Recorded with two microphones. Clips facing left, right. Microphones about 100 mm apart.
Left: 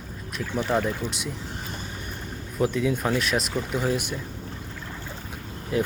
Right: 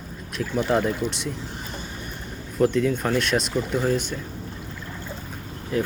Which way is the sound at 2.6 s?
5° left (ahead or behind).